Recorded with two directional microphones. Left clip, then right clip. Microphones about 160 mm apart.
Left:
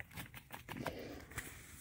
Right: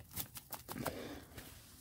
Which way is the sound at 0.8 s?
20° right (ahead or behind).